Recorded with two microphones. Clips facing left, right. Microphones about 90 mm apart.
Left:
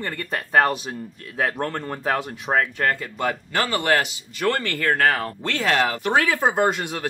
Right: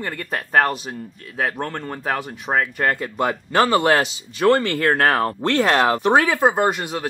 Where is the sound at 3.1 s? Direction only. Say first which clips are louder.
Right 5 dB; 30° right (ahead or behind).